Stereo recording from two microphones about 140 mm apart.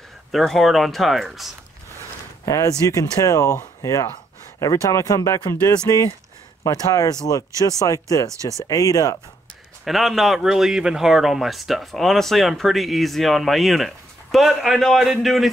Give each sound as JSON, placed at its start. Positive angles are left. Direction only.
{"t": 0.3, "sound": "speech", "side_deg": 0}
{"t": 2.4, "sound": "speech", "side_deg": 20}
{"t": 9.8, "sound": "speech", "side_deg": 0}